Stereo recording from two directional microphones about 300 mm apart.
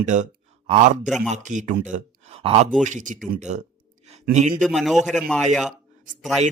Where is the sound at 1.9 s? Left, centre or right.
Right.